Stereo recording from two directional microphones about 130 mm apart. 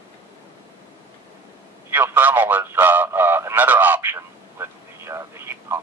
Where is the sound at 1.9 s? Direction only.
15° right (ahead or behind).